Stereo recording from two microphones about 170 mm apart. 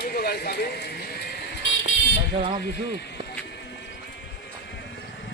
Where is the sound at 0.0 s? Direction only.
65° left (ahead or behind).